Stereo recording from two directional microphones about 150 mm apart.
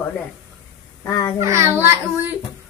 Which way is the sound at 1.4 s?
20° right (ahead or behind).